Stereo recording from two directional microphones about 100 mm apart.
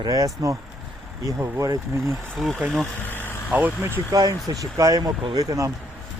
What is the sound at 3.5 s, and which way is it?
Speech, 10° right (ahead or behind).